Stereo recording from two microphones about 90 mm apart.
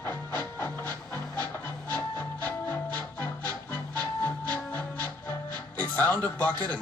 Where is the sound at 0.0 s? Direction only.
25° left (ahead or behind).